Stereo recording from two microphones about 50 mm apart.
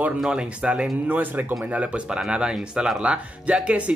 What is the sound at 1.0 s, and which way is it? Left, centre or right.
Speech, right.